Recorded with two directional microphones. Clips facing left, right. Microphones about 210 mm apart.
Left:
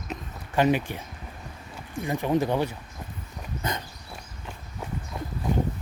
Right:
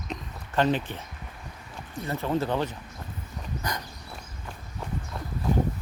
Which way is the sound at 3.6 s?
25° left (ahead or behind).